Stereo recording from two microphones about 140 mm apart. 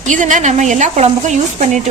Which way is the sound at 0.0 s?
60° right (ahead or behind).